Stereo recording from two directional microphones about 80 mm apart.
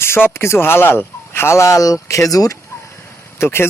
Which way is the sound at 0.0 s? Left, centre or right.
Left.